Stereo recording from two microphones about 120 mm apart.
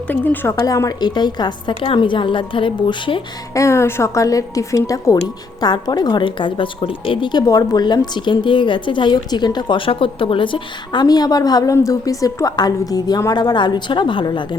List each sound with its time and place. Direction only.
0.1 s a woman's voice: 15° left (ahead or behind)
0.6 s a woman's voice: 30° left (ahead or behind); by 3.2 s 45° left (ahead or behind)
3.5 s a woman's voice: 25° left (ahead or behind); by 14.4 s 40° left (ahead or behind)